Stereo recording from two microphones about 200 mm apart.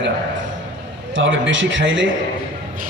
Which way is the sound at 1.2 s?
70° right (ahead or behind).